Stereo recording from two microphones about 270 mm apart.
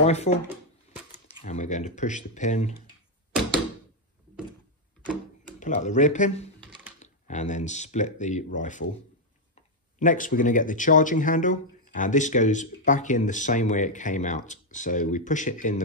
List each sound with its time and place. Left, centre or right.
0.0 s speech: left
5.6 s speech: left
9.9 s speech: left